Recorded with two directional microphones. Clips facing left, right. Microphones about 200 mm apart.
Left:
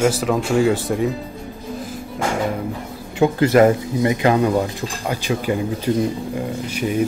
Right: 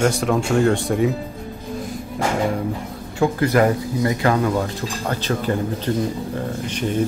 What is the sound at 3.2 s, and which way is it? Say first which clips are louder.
Speech: left 4 dB; 25° left (ahead or behind).